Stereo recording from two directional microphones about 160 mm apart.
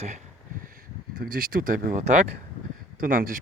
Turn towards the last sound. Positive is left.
turn(degrees=-60)  # may be behind; listen again after turning